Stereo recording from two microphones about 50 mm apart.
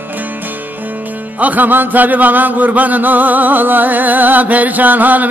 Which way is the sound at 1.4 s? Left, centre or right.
Right.